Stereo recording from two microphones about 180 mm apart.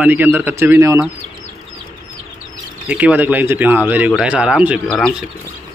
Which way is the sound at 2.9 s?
5° right (ahead or behind).